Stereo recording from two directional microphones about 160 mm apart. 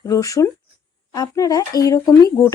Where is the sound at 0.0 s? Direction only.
20° left (ahead or behind).